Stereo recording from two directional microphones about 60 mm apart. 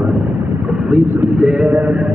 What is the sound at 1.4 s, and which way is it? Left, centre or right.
Speech, centre.